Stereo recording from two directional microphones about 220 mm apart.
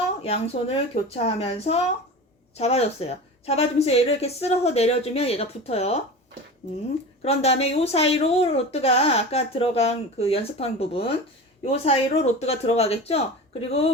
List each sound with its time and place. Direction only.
0.2 s speech: 25° left (ahead or behind)
7.2 s speech: 25° left (ahead or behind)